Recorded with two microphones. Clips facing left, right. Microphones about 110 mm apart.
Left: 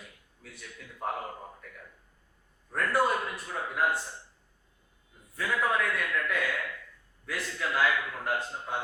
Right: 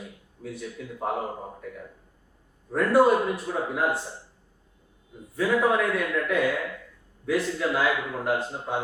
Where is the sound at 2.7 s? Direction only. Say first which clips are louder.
Right 8 dB; 5° right (ahead or behind).